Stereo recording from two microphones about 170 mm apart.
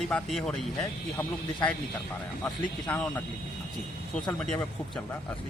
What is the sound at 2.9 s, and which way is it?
Speech, 10° left (ahead or behind).